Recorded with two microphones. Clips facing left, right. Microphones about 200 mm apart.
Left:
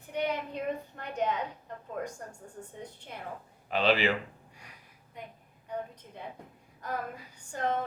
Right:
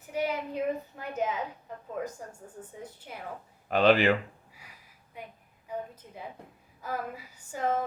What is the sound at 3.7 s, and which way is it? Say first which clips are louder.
Speech: right 5 dB; 50° right (ahead or behind).